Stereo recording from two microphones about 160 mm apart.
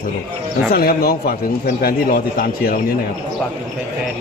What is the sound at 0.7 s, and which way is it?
A man's voice, 70° left (ahead or behind).